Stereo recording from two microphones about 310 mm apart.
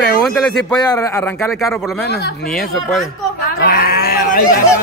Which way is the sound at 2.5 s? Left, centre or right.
Centre.